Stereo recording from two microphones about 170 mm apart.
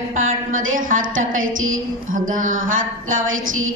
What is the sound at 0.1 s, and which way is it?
A woman's voice, 50° right (ahead or behind).